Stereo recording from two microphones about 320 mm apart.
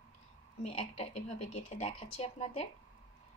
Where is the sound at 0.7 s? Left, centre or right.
Centre.